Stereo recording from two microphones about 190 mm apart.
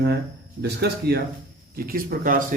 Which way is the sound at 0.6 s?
60° right (ahead or behind).